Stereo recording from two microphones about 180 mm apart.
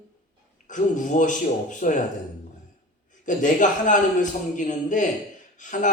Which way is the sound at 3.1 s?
45° left (ahead or behind).